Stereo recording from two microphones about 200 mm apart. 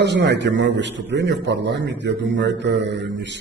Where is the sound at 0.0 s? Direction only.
60° right (ahead or behind).